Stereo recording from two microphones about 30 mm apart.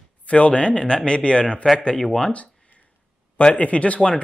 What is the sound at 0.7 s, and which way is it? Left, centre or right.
Speech, left.